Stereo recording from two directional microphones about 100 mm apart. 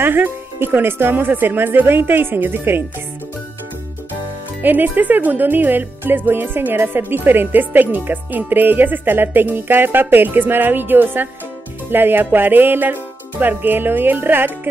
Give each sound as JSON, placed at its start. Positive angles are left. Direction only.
{"t": 0.0, "sound": "speech", "side_deg": -20}
{"t": 4.6, "sound": "speech", "side_deg": -20}